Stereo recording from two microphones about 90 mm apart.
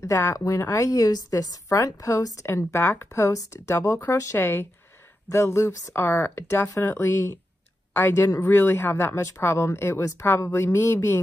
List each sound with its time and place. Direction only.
0.0 s a woman's voice: 35° left (ahead or behind)